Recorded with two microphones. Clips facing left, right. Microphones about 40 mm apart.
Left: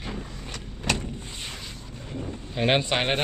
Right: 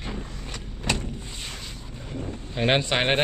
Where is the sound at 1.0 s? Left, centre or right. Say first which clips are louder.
Even; centre.